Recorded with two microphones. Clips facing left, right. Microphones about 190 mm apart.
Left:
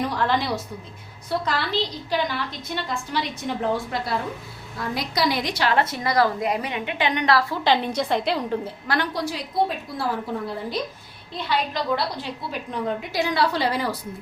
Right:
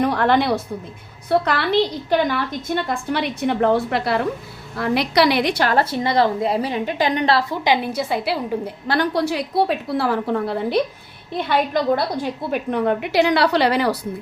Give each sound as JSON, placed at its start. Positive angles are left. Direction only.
{"t": 0.0, "sound": "a woman's voice", "side_deg": -60}
{"t": 5.6, "sound": "a woman's voice", "side_deg": -35}
{"t": 7.5, "sound": "a woman's voice", "side_deg": -15}
{"t": 9.1, "sound": "a woman's voice", "side_deg": -65}
{"t": 11.3, "sound": "a woman's voice", "side_deg": -55}